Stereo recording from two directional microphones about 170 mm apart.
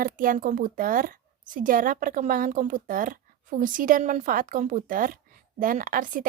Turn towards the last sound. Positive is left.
turn(degrees=-55)  # may be behind; listen again after turning